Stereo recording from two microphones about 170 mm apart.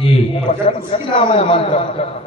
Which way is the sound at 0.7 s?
35° left (ahead or behind).